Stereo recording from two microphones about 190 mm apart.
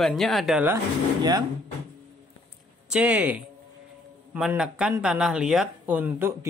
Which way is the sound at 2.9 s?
5° right (ahead or behind).